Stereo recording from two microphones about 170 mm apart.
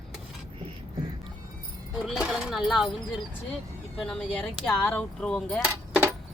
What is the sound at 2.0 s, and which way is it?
Speech, centre (ahead or behind).